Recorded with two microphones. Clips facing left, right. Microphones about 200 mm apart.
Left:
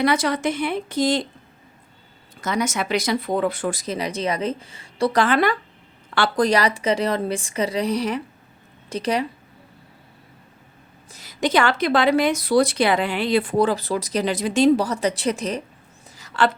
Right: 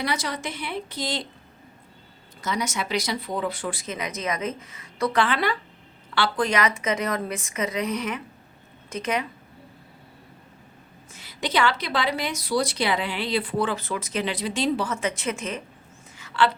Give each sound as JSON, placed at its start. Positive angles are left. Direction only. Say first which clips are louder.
{"t": 0.0, "sound": "speech", "louder": "left 8 dB", "side_deg": 55}
{"t": 2.4, "sound": "speech", "louder": "left 5 dB", "side_deg": 50}
{"t": 11.1, "sound": "speech", "louder": "left 6 dB", "side_deg": 40}
{"t": 16.1, "sound": "a sound", "louder": "left 2 dB", "side_deg": 40}